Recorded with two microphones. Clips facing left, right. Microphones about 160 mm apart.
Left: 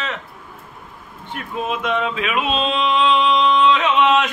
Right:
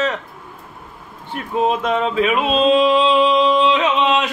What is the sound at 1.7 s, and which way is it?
Mantra, 40° right (ahead or behind).